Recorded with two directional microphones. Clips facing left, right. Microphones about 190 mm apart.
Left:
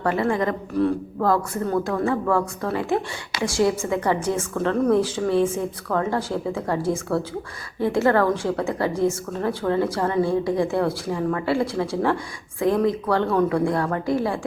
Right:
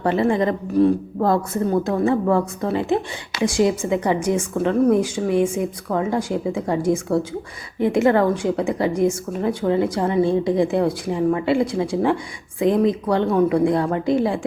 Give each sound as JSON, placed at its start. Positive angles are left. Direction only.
{"t": 0.0, "sound": "a woman's voice", "side_deg": -25}